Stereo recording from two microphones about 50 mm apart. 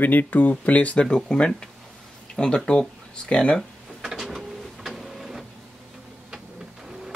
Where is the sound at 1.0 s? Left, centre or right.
Centre.